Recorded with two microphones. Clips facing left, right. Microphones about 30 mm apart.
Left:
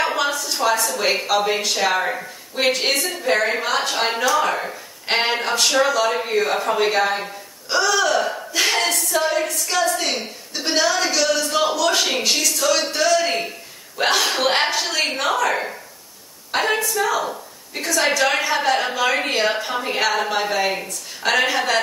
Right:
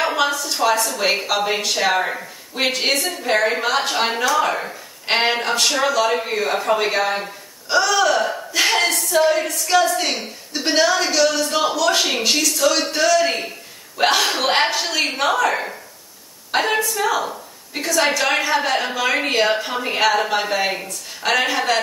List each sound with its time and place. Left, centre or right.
0.0 s a woman's voice: centre